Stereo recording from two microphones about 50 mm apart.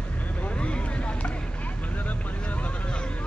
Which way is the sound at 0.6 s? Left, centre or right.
Left.